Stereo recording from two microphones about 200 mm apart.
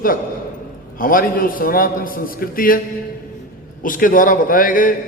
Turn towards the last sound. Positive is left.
turn(degrees=45)  # may be behind; listen again after turning